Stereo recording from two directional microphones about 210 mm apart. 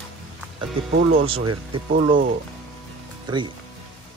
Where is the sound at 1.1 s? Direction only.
25° right (ahead or behind).